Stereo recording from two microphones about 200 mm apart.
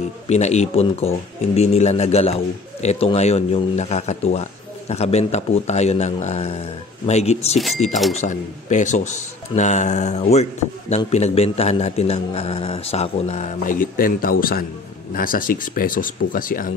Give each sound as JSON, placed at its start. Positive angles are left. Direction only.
{"t": 0.3, "sound": "speech", "side_deg": 35}
{"t": 7.5, "sound": "speech", "side_deg": 0}
{"t": 8.1, "sound": "speech", "side_deg": 35}